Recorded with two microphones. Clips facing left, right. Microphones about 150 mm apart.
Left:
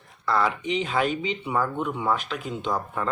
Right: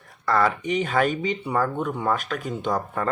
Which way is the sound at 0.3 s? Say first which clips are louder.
Right 2 dB; 55° right (ahead or behind).